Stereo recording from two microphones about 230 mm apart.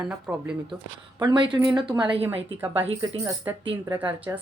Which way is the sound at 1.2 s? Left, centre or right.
Centre.